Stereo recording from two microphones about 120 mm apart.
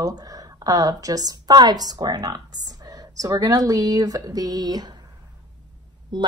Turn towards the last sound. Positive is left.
turn(degrees=-40)  # may be behind; listen again after turning